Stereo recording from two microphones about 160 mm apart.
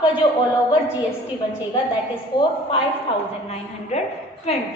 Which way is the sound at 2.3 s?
25° left (ahead or behind).